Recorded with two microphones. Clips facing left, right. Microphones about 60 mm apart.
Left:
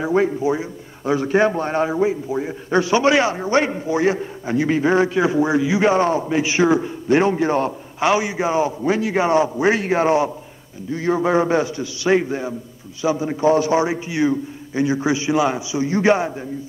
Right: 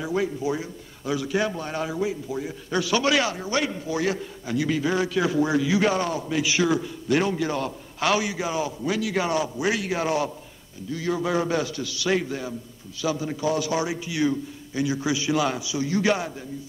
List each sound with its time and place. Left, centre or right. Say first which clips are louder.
0.0 s a man's voice: left 7 dB; left